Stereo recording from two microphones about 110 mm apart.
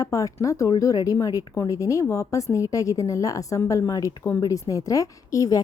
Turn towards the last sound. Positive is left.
turn(degrees=30)  # may be behind; listen again after turning